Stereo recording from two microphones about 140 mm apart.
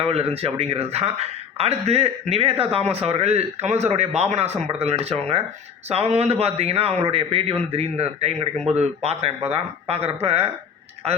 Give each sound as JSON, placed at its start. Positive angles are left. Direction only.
{"t": 0.0, "sound": "a man's voice", "side_deg": -45}